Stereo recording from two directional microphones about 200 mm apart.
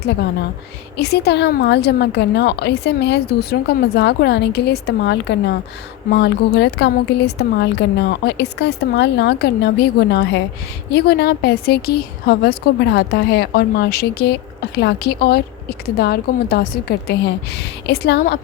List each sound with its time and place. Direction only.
0.0 s a woman's voice: 55° left (ahead or behind)